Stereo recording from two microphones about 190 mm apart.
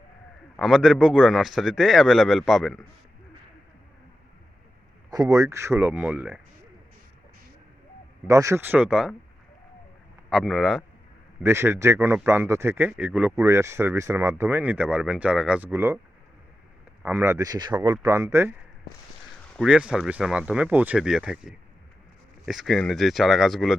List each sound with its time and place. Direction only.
0.5 s a man's voice: centre (ahead or behind)
5.1 s speech: 20° right (ahead or behind)
8.3 s speech: 15° right (ahead or behind)
10.2 s a man's voice: centre (ahead or behind)
11.4 s speech: 15° right (ahead or behind)
17.0 s speech: 10° right (ahead or behind)
19.5 s a man's voice: 5° right (ahead or behind)